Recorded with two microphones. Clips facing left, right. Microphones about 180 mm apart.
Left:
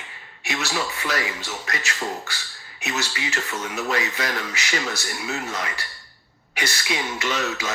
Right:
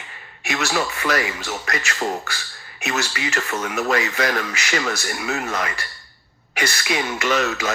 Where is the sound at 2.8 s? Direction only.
70° right (ahead or behind).